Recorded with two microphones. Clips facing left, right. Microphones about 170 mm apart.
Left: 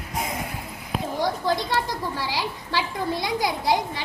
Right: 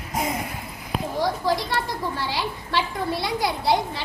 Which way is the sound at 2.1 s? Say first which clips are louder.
Right 1 dB; 15° left (ahead or behind).